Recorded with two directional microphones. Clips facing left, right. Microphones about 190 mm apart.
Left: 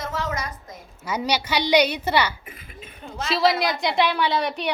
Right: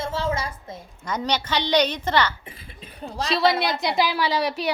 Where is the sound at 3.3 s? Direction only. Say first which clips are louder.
Even; centre (ahead or behind).